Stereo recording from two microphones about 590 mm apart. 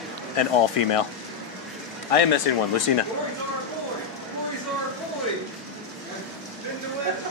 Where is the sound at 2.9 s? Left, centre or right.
Left.